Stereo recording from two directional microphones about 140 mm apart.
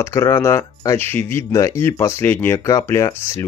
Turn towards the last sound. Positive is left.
turn(degrees=20)  # may be behind; listen again after turning